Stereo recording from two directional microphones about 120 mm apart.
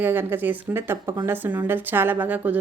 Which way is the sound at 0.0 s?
15° right (ahead or behind).